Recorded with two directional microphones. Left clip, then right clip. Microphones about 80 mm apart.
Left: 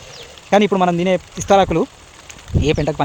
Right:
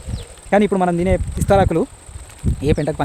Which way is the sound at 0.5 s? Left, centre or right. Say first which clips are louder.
Left 2 dB; right.